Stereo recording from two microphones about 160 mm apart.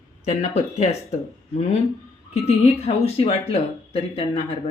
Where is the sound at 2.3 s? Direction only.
40° left (ahead or behind).